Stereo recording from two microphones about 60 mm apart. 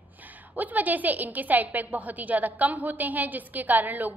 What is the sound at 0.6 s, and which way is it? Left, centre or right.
A woman's voice, right.